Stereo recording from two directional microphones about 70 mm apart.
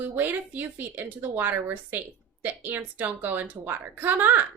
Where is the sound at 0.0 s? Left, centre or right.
Right.